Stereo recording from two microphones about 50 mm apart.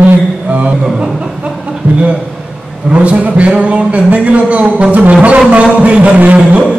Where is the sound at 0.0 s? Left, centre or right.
Right.